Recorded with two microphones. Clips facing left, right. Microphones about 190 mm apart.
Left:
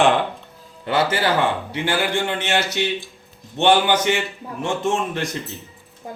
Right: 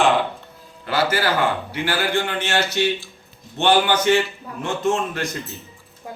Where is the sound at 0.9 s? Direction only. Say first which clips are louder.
Left 1 dB; 25° left (ahead or behind).